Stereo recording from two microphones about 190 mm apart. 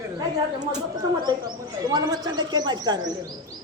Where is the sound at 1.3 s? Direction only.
20° right (ahead or behind).